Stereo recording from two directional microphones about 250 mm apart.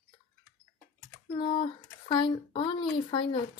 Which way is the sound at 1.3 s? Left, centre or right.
Centre.